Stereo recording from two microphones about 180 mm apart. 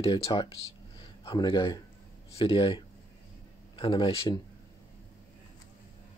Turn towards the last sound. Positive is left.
turn(degrees=30)  # may be behind; listen again after turning